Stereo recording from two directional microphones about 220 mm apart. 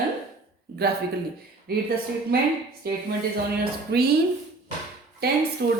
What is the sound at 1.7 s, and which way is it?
Speech, 45° right (ahead or behind).